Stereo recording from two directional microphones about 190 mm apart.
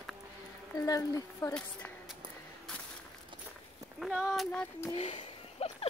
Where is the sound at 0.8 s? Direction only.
20° left (ahead or behind).